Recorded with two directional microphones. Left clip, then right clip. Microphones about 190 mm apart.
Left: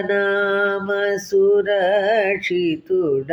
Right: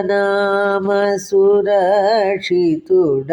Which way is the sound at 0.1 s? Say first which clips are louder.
Right 3 dB; 35° right (ahead or behind).